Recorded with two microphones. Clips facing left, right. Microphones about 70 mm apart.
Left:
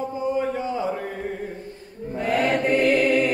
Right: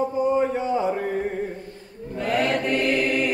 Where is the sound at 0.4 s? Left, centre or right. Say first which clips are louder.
Right 3 dB; right.